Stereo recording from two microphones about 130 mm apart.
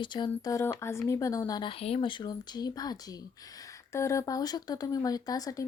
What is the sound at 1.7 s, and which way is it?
Speech, 45° left (ahead or behind).